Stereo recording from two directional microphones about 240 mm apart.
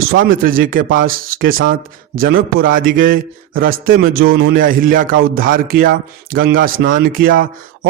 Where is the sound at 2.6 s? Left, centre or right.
Right.